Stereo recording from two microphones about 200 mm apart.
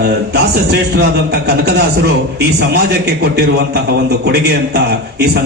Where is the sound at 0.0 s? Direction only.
55° right (ahead or behind).